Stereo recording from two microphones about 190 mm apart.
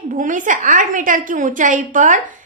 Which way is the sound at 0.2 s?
45° right (ahead or behind).